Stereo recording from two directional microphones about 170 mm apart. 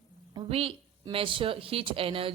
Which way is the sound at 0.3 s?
35° right (ahead or behind).